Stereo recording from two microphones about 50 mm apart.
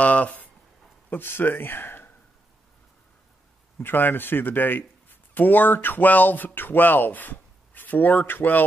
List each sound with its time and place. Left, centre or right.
0.0 s speech: left
1.1 s speech: left
3.8 s speech: left